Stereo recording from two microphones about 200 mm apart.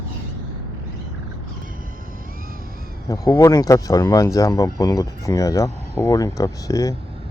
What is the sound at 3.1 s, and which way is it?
Speech, 15° left (ahead or behind).